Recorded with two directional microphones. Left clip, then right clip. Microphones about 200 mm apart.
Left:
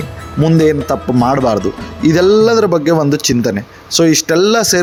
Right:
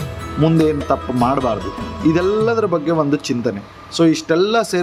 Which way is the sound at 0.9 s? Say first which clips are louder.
Left 3 dB; 20° left (ahead or behind).